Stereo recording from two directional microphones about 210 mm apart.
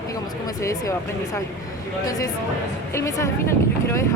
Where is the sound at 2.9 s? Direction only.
15° left (ahead or behind).